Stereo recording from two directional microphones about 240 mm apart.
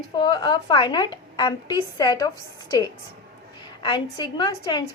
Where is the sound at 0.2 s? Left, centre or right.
Centre.